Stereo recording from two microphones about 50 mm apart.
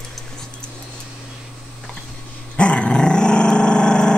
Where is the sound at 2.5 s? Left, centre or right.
Left.